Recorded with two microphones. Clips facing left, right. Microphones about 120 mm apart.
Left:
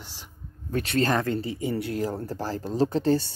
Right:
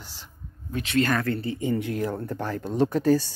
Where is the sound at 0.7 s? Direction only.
40° left (ahead or behind).